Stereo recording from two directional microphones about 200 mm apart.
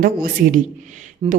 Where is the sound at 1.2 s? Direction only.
25° right (ahead or behind).